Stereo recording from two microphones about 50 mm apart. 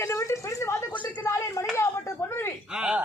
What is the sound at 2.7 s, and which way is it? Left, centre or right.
Speech, centre.